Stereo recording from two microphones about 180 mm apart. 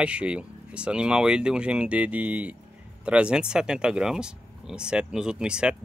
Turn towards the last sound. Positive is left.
turn(degrees=-5)  # may be behind; listen again after turning